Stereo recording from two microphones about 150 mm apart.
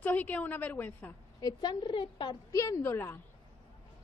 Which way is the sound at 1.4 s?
30° left (ahead or behind).